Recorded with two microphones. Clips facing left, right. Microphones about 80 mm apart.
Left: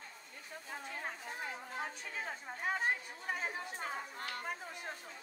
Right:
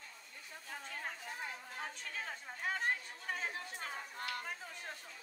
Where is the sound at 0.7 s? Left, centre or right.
Centre.